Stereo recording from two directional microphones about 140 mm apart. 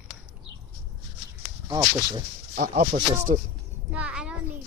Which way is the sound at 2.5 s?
90° right.